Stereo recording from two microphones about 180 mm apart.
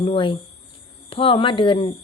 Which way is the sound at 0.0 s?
30° left (ahead or behind).